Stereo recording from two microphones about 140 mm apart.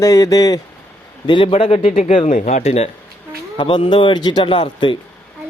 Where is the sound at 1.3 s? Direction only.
40° left (ahead or behind).